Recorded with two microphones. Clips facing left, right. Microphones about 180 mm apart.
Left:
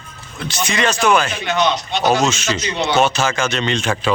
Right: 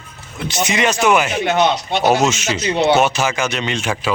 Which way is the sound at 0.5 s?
20° right (ahead or behind).